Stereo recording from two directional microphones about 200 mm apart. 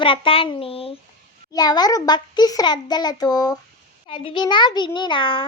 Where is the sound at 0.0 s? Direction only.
25° left (ahead or behind).